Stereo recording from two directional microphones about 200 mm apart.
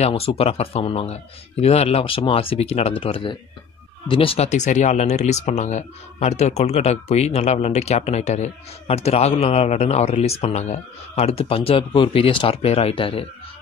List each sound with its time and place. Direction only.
0.0 s speech: 30° left (ahead or behind)